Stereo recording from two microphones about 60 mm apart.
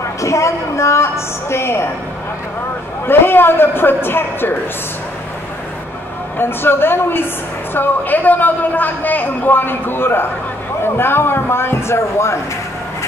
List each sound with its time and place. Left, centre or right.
0.2 s a woman's voice: left
3.1 s a man's voice: left
6.3 s a man's voice: left